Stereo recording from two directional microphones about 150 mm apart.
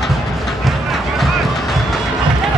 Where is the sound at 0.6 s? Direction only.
Centre (ahead or behind).